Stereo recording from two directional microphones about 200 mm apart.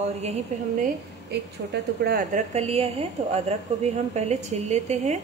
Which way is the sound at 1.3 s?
55° right (ahead or behind).